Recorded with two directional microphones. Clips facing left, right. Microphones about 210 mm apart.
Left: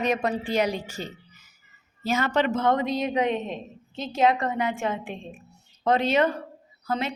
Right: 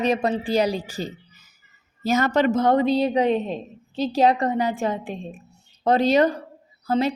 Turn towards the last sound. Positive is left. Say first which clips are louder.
# right 7 dB
turn(degrees=-35)  # may be behind; listen again after turning